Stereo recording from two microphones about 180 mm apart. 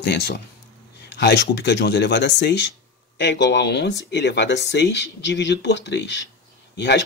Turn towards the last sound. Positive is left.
turn(degrees=70)  # may be behind; listen again after turning